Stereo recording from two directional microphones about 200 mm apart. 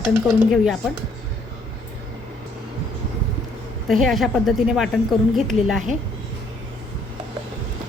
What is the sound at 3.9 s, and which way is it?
A woman's voice, centre (ahead or behind).